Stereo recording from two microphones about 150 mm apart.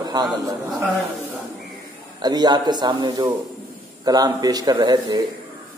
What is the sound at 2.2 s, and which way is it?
Speech, 30° right (ahead or behind).